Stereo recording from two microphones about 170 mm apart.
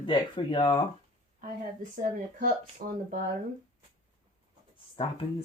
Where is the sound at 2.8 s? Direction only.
55° right (ahead or behind).